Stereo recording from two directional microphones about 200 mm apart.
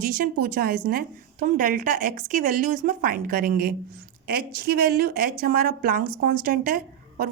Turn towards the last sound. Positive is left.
turn(degrees=-45)  # may be behind; listen again after turning